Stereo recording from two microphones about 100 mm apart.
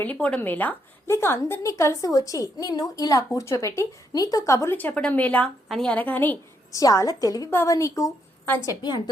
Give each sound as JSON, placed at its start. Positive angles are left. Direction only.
{"t": 0.0, "sound": "a woman's voice", "side_deg": 15}
{"t": 6.7, "sound": "speech", "side_deg": 35}
{"t": 7.5, "sound": "speech", "side_deg": 25}